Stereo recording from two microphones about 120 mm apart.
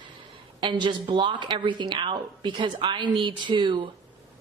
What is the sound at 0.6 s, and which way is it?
A woman's voice, 40° right (ahead or behind).